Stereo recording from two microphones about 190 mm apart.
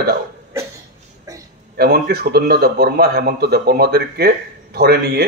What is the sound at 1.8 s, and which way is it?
A man's voice, 55° right (ahead or behind).